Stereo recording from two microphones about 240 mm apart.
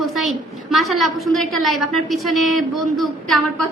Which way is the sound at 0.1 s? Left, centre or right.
Centre.